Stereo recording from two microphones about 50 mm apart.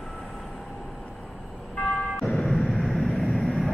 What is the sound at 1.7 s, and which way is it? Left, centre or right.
Vehicle, left.